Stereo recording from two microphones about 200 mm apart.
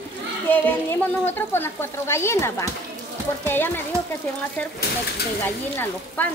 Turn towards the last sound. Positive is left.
turn(degrees=10)  # may be behind; listen again after turning